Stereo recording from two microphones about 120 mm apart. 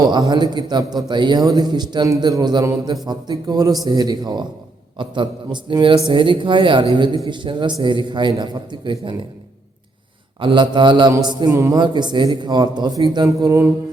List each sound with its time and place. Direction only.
0.0 s a man's voice: 35° right (ahead or behind)
10.4 s a man's voice: 40° right (ahead or behind)
11.5 s mantra: 25° right (ahead or behind)
11.8 s a man's voice: 40° right (ahead or behind)
13.1 s mantra: 30° right (ahead or behind)